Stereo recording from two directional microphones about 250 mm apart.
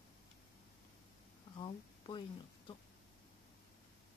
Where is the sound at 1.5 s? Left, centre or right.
Centre.